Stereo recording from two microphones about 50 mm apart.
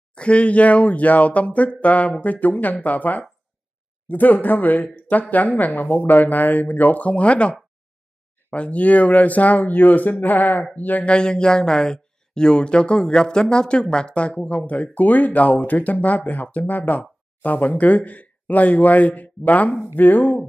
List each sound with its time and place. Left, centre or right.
0.1 s speech: left
11.1 s speech: centre; by 20.4 s left